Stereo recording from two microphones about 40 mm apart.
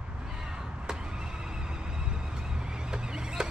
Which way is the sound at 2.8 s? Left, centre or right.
Centre.